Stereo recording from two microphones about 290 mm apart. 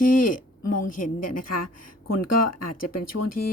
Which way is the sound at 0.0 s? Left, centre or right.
Left.